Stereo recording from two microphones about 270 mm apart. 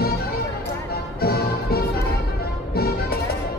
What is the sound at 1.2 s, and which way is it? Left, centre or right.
Music, left.